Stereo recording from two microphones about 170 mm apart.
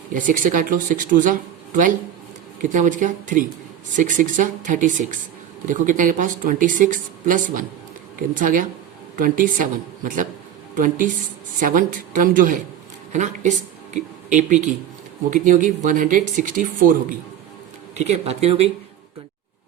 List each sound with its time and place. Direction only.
0.1 s speech: 50° right (ahead or behind)
17.9 s speech: 40° right (ahead or behind)